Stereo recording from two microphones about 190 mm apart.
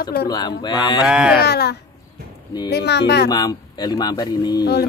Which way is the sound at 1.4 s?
60° left (ahead or behind).